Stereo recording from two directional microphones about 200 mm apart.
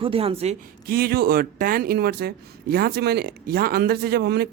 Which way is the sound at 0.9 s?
50° right (ahead or behind).